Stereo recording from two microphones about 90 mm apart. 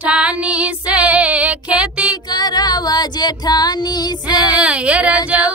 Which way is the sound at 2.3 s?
50° left (ahead or behind).